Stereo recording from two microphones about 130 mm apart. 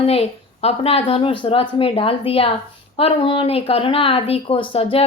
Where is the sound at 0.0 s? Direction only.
50° left (ahead or behind).